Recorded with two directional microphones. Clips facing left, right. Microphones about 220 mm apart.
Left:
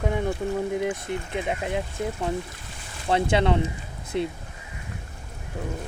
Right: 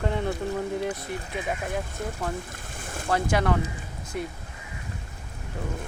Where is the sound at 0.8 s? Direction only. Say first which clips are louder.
Left 3 dB; 20° left (ahead or behind).